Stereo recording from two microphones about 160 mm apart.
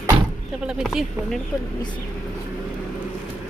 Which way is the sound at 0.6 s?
5° right (ahead or behind).